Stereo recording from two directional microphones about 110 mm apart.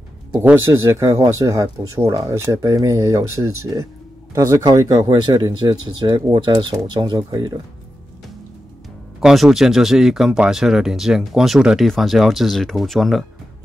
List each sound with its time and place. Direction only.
0.3 s speech: 20° right (ahead or behind)
9.2 s speech: 5° right (ahead or behind)